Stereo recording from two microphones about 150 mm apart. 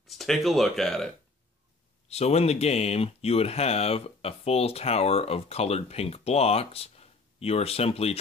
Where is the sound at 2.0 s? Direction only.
45° left (ahead or behind).